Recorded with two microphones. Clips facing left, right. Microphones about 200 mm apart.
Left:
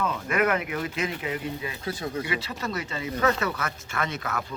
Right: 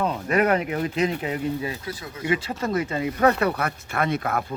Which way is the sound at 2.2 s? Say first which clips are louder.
Right 6 dB; 50° right (ahead or behind).